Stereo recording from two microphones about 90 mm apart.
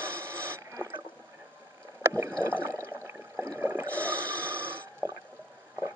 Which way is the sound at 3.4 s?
35° right (ahead or behind).